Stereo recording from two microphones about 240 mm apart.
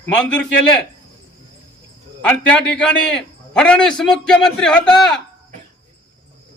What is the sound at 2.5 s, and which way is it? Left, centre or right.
A man's voice, centre.